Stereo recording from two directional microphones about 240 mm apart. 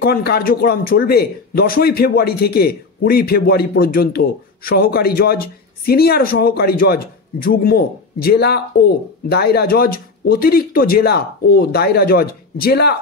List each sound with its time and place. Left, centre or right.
0.0 s a man's voice: left